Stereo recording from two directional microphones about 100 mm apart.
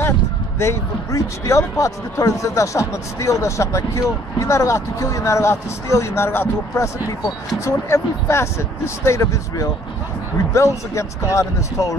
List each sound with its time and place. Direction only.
0.6 s speech: 30° left (ahead or behind)